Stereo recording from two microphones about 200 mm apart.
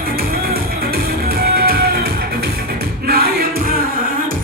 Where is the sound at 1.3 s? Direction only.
50° right (ahead or behind).